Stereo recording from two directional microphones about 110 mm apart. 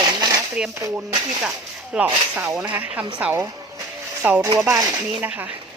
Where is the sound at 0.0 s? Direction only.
35° right (ahead or behind).